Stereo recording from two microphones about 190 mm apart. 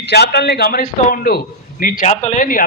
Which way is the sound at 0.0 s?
60° left (ahead or behind).